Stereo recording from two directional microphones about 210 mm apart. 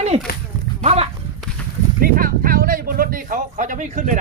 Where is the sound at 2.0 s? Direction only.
45° right (ahead or behind).